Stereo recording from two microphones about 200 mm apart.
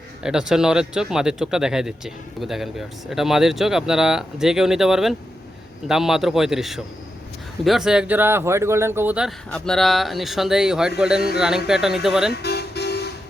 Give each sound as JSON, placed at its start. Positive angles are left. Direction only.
{"t": 0.2, "sound": "speech", "side_deg": -5}
{"t": 12.3, "sound": "music", "side_deg": 55}